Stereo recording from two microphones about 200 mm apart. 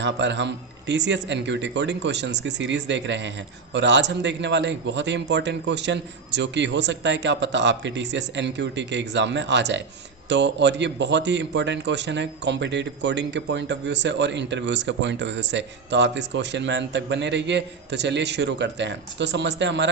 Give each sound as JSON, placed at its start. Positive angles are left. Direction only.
{"t": 0.0, "sound": "speech", "side_deg": -65}